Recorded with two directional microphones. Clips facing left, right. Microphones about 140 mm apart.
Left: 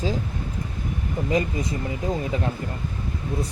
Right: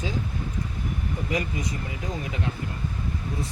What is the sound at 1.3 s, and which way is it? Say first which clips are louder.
Speech: left 6 dB; 25° left (ahead or behind).